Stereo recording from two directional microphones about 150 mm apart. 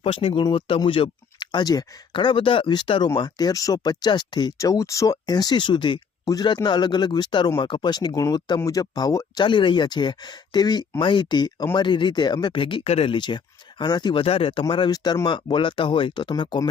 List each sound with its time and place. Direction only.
0.0 s speech: 40° left (ahead or behind)